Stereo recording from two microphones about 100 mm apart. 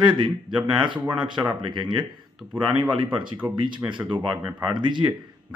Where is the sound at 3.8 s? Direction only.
55° right (ahead or behind).